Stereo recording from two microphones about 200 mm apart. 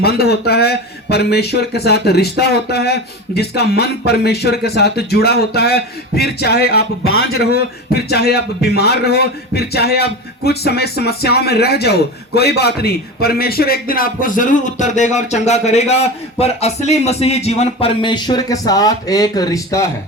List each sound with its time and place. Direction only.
0.0 s a man's voice: 55° left (ahead or behind); by 19.9 s 15° left (ahead or behind)